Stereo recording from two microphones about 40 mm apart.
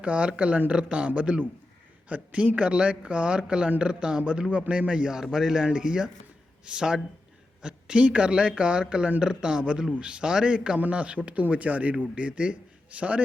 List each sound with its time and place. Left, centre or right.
0.0 s a man's voice: right
5.1 s speech: centre
10.8 s a man's voice: right